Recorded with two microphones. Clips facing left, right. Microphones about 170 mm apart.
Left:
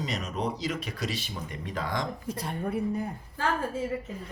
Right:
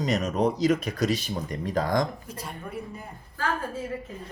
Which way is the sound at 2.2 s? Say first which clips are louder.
Left 6 dB; 60° left (ahead or behind).